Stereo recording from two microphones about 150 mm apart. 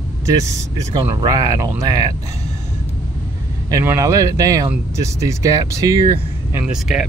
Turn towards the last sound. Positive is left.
turn(degrees=-5)  # may be behind; listen again after turning